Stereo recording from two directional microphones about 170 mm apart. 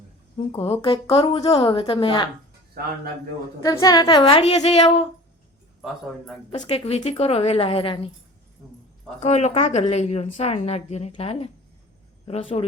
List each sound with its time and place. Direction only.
0.3 s a woman's voice: 30° left (ahead or behind)
2.8 s a man's voice: 65° right (ahead or behind)
3.6 s a woman's voice: 20° left (ahead or behind); by 5.0 s 35° left (ahead or behind)
6.5 s a woman's voice: 35° left (ahead or behind)
9.2 s a woman's voice: 40° left (ahead or behind)